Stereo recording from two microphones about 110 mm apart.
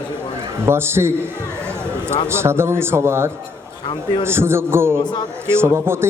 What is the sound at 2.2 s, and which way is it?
A man's voice, 25° right (ahead or behind).